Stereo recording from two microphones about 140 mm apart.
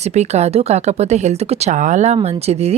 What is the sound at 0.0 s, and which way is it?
Speech, 50° right (ahead or behind).